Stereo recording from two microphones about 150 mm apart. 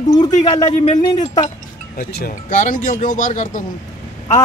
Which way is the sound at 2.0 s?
90° left.